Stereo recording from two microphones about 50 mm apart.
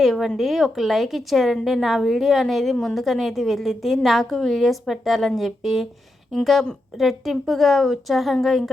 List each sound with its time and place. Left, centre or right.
0.0 s a woman's voice: centre